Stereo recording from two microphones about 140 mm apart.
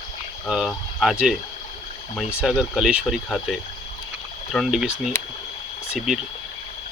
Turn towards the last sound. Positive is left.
turn(degrees=0)  # may be behind; listen again after turning